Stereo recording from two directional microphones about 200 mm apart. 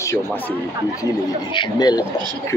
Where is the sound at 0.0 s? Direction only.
10° left (ahead or behind).